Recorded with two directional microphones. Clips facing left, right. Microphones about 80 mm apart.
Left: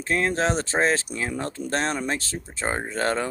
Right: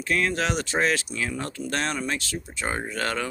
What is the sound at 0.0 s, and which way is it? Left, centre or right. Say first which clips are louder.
Speech: left 2 dB; left.